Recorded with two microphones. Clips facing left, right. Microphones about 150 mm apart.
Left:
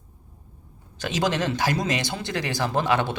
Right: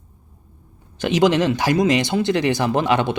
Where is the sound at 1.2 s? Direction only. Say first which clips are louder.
Right 7 dB; 20° right (ahead or behind).